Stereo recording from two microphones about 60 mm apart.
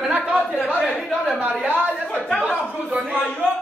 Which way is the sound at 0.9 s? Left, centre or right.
Centre.